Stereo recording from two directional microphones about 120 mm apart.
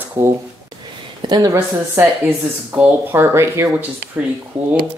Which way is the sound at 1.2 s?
35° right (ahead or behind).